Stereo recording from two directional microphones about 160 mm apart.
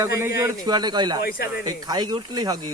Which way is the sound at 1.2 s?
70° left (ahead or behind).